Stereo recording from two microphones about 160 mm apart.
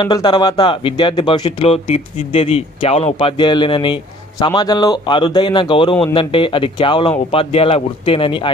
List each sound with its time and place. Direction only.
0.0 s speech: 30° left (ahead or behind)